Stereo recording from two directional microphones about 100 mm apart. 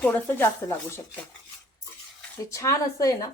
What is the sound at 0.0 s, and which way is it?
Speech, 20° left (ahead or behind).